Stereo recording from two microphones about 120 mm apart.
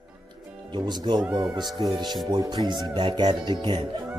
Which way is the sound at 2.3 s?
40° right (ahead or behind).